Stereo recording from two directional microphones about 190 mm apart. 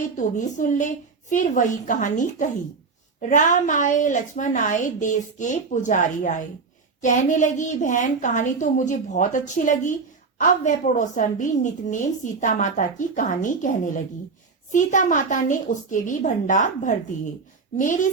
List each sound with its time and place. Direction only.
0.2 s a woman's voice: 45° left (ahead or behind)